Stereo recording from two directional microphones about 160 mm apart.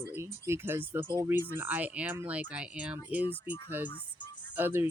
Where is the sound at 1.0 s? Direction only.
25° right (ahead or behind).